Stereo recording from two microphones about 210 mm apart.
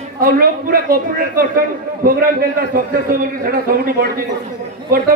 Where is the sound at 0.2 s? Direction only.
45° right (ahead or behind).